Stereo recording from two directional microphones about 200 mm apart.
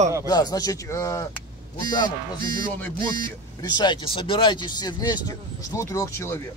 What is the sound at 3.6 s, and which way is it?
Speech, 20° left (ahead or behind).